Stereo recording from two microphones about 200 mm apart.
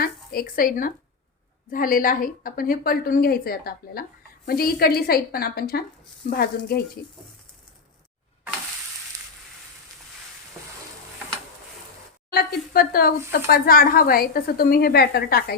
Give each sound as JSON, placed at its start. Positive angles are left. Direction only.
{"t": 0.0, "sound": "speech", "side_deg": 45}
{"t": 12.3, "sound": "speech", "side_deg": 50}